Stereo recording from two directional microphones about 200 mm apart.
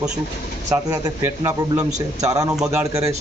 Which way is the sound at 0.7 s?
15° right (ahead or behind).